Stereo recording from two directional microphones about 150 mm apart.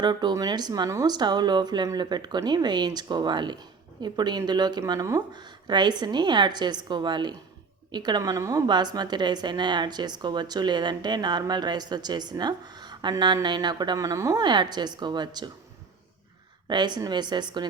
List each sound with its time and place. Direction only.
0.0 s a woman's voice: 30° right (ahead or behind)
16.6 s a woman's voice: 30° right (ahead or behind)